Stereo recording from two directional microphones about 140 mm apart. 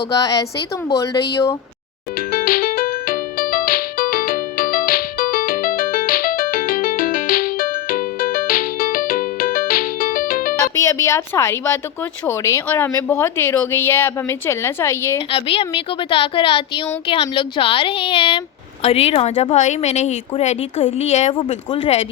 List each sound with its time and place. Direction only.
0.1 s speech: 25° left (ahead or behind)
2.3 s music: 90° left
10.8 s speech: 20° left (ahead or behind)
15.3 s a woman's voice: 40° left (ahead or behind)
21.3 s speech: 35° left (ahead or behind)